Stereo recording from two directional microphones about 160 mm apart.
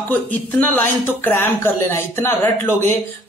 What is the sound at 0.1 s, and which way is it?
Speech, 10° left (ahead or behind).